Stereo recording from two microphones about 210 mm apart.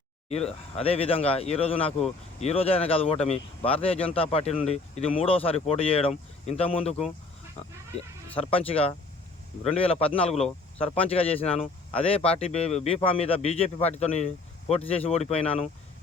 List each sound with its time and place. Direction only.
0.3 s speech: 30° left (ahead or behind)
8.4 s speech: 25° left (ahead or behind)